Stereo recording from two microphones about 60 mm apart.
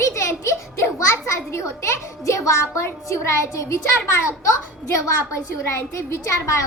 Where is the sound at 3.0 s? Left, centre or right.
Left.